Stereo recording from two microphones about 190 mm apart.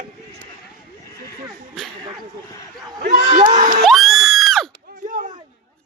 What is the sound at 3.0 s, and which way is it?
Speech, 45° right (ahead or behind).